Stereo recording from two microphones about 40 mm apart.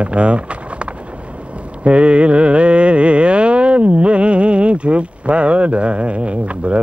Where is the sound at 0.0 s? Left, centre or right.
Right.